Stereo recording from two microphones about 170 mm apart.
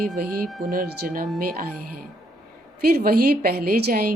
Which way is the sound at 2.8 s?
65° right (ahead or behind).